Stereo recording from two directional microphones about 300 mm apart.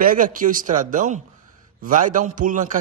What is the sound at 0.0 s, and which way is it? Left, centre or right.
A man's voice, right.